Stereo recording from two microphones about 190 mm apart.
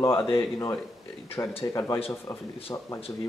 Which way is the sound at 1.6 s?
15° left (ahead or behind).